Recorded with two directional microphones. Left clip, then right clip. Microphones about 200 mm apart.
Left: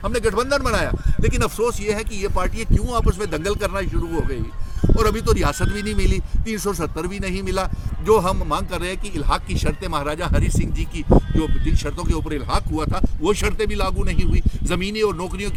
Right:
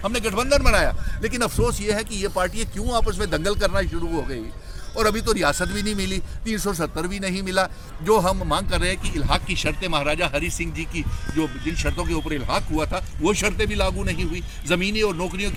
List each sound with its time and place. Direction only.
0.0 s speech: 30° left (ahead or behind)
0.3 s speech: 10° left (ahead or behind)
9.6 s speech: 30° left (ahead or behind)